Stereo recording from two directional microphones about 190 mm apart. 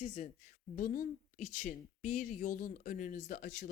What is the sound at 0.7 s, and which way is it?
A woman's voice, 50° left (ahead or behind).